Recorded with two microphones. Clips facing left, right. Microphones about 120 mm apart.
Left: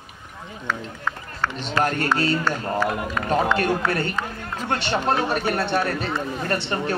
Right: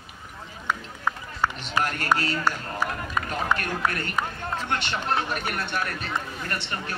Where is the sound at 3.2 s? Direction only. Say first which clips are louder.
Left 9 dB; 35° left (ahead or behind).